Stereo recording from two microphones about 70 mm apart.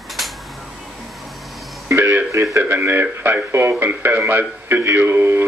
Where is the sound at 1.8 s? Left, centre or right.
Right.